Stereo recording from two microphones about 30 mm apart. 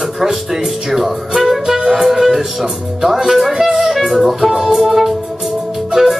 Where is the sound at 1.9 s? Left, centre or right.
Centre.